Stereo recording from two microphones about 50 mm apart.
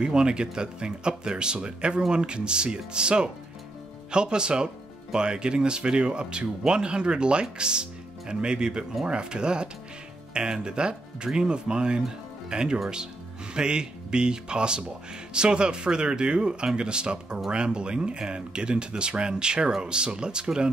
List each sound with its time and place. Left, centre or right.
0.0 s speech: centre